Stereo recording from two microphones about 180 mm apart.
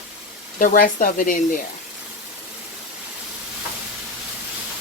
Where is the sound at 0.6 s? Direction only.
50° left (ahead or behind).